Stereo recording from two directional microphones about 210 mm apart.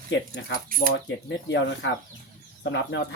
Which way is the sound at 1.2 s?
60° left (ahead or behind).